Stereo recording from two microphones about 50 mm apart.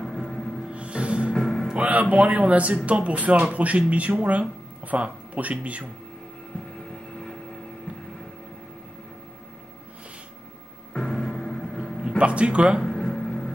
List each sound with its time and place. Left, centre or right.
0.0 s music: centre
0.7 s music: right
1.3 s music: centre
1.8 s speech: right
10.9 s music: centre
12.2 s speech: right
12.8 s a sound: centre